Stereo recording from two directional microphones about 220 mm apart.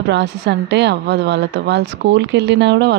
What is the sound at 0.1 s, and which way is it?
A woman's voice, 50° right (ahead or behind).